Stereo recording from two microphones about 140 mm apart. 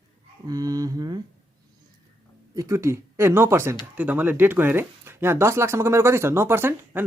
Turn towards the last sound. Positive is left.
turn(degrees=-15)  # may be behind; listen again after turning